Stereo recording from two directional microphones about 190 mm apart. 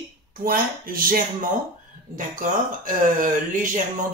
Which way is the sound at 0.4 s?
50° right (ahead or behind).